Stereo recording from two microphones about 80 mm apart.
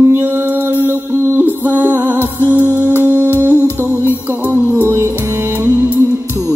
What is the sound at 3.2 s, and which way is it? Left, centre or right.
Humming, right.